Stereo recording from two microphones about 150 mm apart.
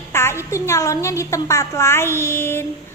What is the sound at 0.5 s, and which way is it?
A woman's voice, 20° left (ahead or behind).